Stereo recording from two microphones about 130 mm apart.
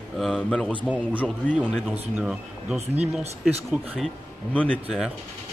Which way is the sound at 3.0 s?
55° right (ahead or behind).